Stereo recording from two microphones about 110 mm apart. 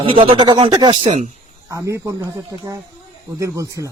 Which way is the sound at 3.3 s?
30° right (ahead or behind).